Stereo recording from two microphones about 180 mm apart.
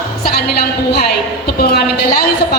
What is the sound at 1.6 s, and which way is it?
Speech, 60° left (ahead or behind).